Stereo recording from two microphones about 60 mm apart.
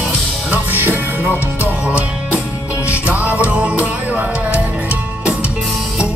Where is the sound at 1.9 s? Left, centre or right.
Right.